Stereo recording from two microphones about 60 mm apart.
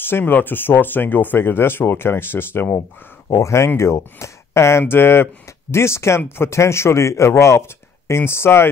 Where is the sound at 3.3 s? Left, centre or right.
Left.